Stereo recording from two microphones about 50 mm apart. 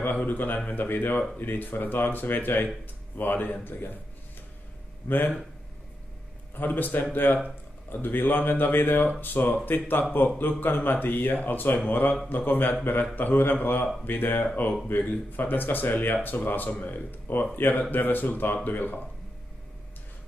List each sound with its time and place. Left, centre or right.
0.0 s a man's voice: left
5.0 s a man's voice: left
6.5 s speech: left